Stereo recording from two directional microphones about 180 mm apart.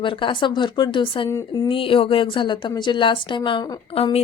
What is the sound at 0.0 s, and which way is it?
A woman's voice, 30° left (ahead or behind).